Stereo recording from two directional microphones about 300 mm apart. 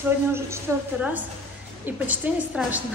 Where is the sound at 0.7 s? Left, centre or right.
Centre.